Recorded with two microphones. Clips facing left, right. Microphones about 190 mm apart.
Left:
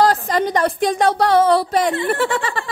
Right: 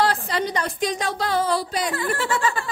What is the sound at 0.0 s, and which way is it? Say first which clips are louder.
Speech: left 6 dB; 45° left (ahead or behind).